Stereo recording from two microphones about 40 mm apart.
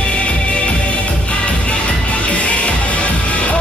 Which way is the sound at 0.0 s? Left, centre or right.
Left.